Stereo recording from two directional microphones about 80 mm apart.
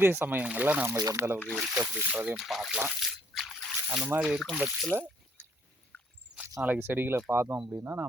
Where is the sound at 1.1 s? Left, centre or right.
Right.